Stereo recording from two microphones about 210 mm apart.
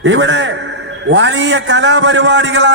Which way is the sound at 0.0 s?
60° right (ahead or behind).